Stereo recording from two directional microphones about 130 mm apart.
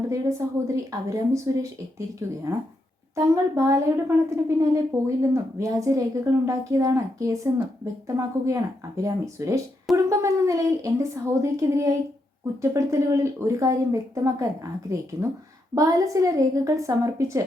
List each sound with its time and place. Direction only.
0.1 s a woman's voice: 25° right (ahead or behind)